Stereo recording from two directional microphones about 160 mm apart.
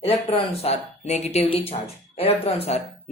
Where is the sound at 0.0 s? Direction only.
40° left (ahead or behind).